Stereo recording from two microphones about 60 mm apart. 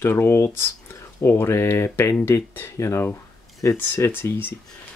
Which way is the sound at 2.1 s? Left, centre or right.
Left.